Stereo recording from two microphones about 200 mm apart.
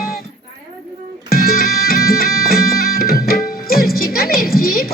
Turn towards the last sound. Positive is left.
turn(degrees=50)  # may be behind; listen again after turning